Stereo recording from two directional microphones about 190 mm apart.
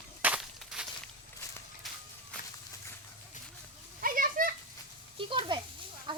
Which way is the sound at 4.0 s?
45° right (ahead or behind).